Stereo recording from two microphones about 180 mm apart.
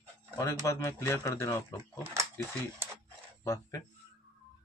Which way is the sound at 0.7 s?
15° left (ahead or behind).